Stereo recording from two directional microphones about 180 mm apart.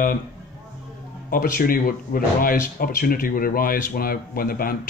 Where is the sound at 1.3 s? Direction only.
55° left (ahead or behind).